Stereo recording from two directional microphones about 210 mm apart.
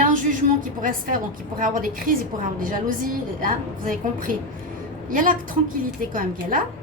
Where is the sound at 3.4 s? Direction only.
40° right (ahead or behind).